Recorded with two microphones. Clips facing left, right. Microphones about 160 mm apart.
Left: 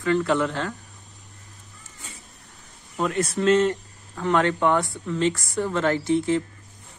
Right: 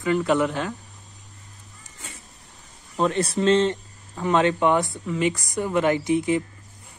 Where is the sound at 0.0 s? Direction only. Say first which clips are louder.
Right 1 dB; 15° right (ahead or behind).